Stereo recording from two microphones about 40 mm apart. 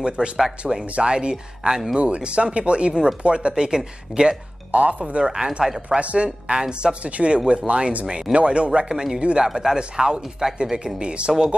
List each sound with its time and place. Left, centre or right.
0.4 s speech: centre
0.9 s speech: right
2.0 s speech: right
4.6 s speech: right
5.2 s speech: right
8.9 s speech: centre